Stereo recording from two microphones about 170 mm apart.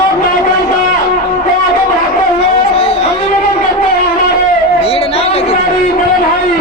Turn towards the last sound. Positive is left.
turn(degrees=35)  # may be behind; listen again after turning